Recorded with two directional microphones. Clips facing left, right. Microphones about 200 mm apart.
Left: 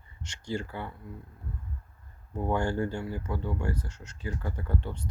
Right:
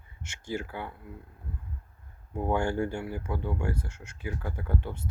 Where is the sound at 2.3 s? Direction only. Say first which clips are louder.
Right 1 dB; 10° right (ahead or behind).